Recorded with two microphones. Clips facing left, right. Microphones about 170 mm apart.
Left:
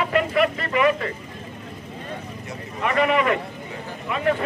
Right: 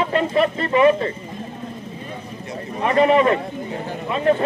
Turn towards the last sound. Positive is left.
turn(degrees=-30)  # may be behind; listen again after turning